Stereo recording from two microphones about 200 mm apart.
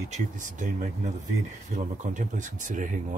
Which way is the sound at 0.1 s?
40° right (ahead or behind).